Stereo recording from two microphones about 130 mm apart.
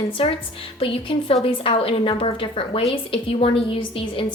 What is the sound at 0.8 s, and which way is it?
A woman's voice, 45° left (ahead or behind).